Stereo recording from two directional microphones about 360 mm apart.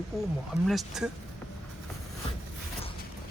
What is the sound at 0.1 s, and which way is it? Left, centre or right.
Speech, centre.